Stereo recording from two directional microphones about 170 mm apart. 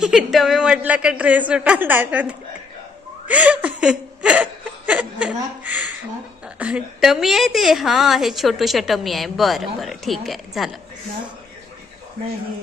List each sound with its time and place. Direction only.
0.0 s speech: 5° right (ahead or behind)
3.2 s laughter: 10° right (ahead or behind)
6.6 s a woman's voice: 5° right (ahead or behind)